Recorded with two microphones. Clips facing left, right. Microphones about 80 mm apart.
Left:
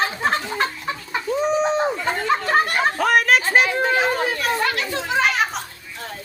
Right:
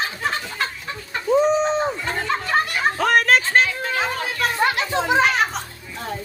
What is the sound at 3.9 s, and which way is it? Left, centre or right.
Chatter, left.